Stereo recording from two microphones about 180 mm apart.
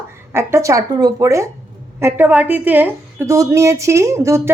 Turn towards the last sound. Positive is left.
turn(degrees=-15)  # may be behind; listen again after turning